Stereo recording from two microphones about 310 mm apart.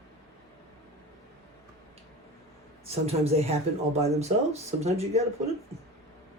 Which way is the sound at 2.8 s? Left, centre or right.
Centre.